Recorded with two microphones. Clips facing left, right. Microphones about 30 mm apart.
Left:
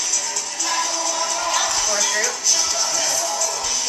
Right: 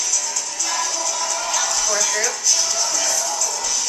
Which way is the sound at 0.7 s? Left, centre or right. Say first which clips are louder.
Left 2 dB; centre.